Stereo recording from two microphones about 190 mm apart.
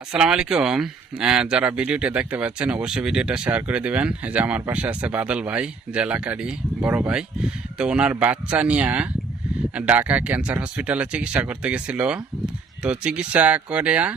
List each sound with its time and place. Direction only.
0.1 s speech: 5° right (ahead or behind)